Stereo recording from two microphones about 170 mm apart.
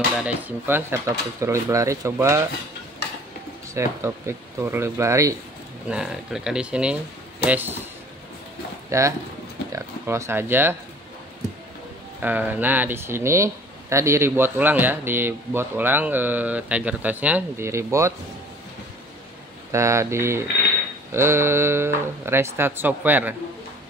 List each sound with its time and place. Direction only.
0.2 s speech: 10° right (ahead or behind)
3.7 s speech: 15° right (ahead or behind)
5.9 s speech: 5° right (ahead or behind)
8.9 s speech: 20° right (ahead or behind)
12.2 s speech: 10° right (ahead or behind)
19.7 s speech: 15° right (ahead or behind)